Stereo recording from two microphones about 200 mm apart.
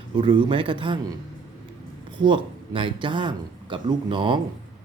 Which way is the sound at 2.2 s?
25° right (ahead or behind).